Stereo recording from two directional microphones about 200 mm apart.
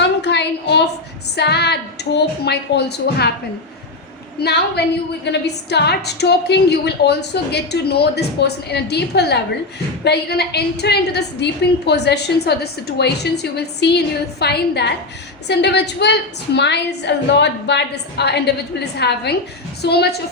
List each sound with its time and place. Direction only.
0.2 s a sound: 60° left (ahead or behind)
1.4 s a woman's voice: 55° left (ahead or behind)
4.4 s a woman's voice: 55° left (ahead or behind)